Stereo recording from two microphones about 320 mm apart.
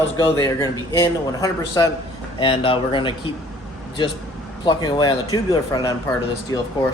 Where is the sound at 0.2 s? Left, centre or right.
Centre.